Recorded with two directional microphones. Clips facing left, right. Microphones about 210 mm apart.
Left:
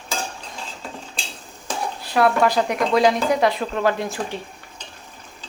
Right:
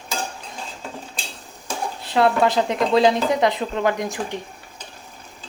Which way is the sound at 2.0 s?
25° right (ahead or behind).